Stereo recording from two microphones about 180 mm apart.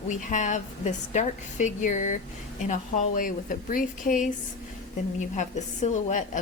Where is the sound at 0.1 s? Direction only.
45° left (ahead or behind).